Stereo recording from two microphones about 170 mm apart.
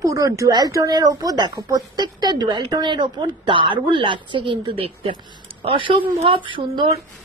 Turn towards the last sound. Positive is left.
turn(degrees=-30)  # may be behind; listen again after turning